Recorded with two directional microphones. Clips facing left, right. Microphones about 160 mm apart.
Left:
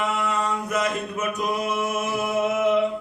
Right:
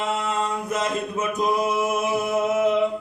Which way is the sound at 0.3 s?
25° right (ahead or behind).